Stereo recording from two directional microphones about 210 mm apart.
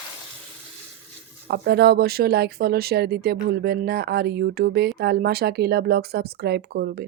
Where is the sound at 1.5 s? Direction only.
50° right (ahead or behind).